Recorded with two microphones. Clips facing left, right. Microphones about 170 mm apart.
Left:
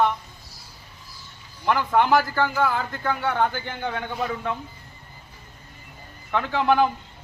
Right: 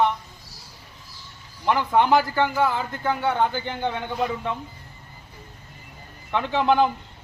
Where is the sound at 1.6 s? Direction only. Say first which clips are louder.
Right 1 dB; 15° right (ahead or behind).